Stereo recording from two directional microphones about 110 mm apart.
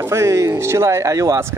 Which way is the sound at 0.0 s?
25° right (ahead or behind).